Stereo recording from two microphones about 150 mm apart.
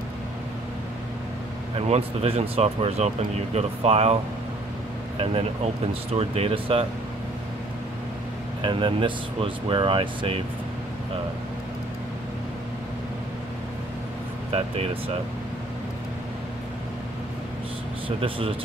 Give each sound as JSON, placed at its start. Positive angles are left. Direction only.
{"t": 1.8, "sound": "speech", "side_deg": -40}
{"t": 6.1, "sound": "speech", "side_deg": -40}
{"t": 8.6, "sound": "speech", "side_deg": -35}
{"t": 18.0, "sound": "speech", "side_deg": -35}